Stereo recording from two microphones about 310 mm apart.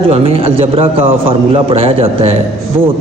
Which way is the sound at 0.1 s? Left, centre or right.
Centre.